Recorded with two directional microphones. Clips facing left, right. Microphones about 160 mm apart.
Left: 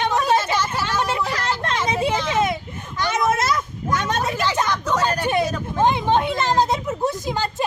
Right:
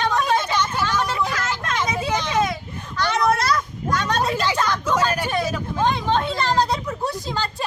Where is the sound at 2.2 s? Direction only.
25° left (ahead or behind).